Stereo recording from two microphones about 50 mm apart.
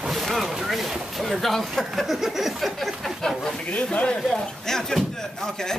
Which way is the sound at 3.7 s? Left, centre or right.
Left.